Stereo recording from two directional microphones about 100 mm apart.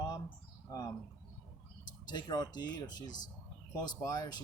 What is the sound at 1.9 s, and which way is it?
Speech, 45° left (ahead or behind).